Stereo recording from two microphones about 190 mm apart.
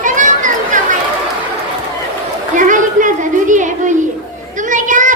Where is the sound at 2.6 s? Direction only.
45° right (ahead or behind).